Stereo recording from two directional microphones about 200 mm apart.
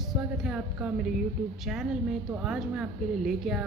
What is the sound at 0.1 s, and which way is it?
A woman's voice, centre (ahead or behind).